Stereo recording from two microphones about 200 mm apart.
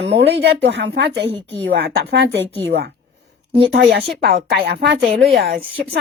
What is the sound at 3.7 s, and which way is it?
Speech, 55° right (ahead or behind).